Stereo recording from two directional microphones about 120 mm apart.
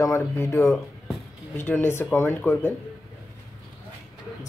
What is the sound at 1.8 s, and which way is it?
Speech, 20° left (ahead or behind).